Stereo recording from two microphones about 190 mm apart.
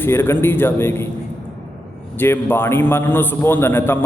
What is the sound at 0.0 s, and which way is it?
A man's voice, 10° left (ahead or behind).